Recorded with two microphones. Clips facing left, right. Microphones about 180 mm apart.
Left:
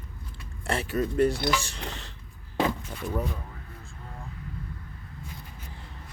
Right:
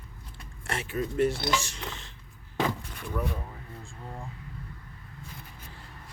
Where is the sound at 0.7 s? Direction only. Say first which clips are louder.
Left 4 dB; 35° left (ahead or behind).